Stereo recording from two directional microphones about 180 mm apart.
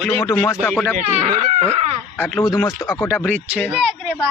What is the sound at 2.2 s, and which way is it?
Speech, 5° left (ahead or behind).